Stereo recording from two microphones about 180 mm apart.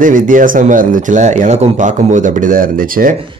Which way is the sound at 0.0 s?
45° right (ahead or behind).